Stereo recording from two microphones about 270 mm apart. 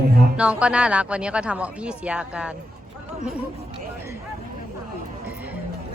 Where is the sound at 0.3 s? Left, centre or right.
Centre.